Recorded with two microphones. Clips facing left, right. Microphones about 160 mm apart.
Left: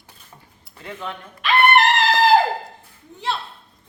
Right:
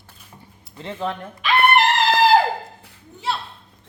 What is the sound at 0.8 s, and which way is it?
Speech, 30° right (ahead or behind).